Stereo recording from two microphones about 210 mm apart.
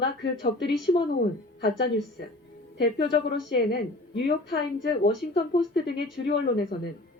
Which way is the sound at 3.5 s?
50° left (ahead or behind).